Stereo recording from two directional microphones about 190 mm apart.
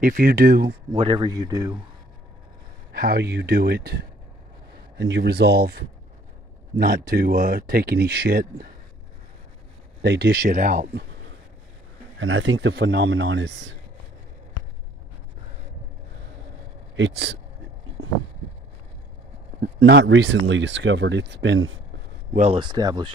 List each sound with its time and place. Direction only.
0.0 s speech: 45° right (ahead or behind)
0.9 s speech: 25° right (ahead or behind)
2.9 s speech: 50° right (ahead or behind)
10.0 s speech: 55° right (ahead or behind)
12.2 s speech: 85° right
16.9 s a man's voice: 70° right (ahead or behind)
18.0 s a sound: 90° right
19.6 s speech: 65° right (ahead or behind); by 21.7 s 80° right
22.3 s speech: 40° right (ahead or behind)
22.6 s speech: 20° right (ahead or behind)